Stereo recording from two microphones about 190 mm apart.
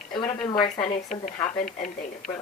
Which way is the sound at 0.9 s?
40° left (ahead or behind).